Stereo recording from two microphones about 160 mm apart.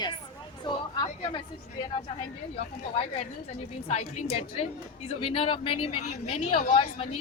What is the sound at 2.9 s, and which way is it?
A woman's voice, 50° left (ahead or behind).